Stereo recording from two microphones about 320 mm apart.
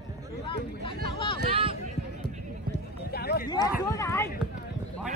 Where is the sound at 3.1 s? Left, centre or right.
Left.